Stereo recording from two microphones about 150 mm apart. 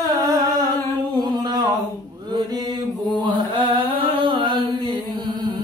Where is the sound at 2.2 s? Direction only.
25° right (ahead or behind).